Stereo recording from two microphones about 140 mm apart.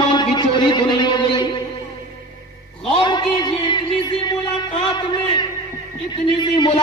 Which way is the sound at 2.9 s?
35° left (ahead or behind).